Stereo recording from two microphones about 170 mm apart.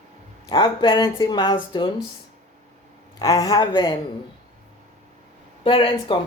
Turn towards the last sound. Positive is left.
turn(degrees=30)  # may be behind; listen again after turning